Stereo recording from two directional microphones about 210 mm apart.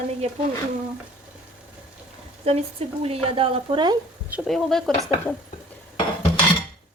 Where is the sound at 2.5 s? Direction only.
25° right (ahead or behind).